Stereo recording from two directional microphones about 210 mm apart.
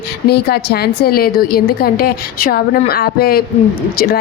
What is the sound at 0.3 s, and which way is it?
A woman's voice, 50° left (ahead or behind).